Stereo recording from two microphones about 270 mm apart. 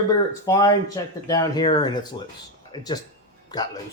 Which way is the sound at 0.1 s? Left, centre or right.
Centre.